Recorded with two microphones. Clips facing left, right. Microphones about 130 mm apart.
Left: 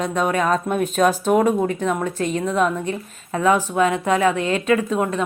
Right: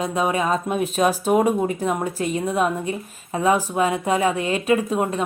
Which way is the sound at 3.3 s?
20° right (ahead or behind).